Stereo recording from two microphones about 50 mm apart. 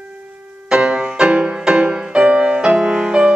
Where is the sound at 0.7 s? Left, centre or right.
Right.